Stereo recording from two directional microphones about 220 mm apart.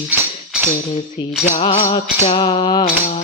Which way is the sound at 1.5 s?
30° left (ahead or behind).